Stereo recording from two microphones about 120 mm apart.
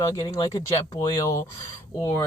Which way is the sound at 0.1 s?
35° left (ahead or behind).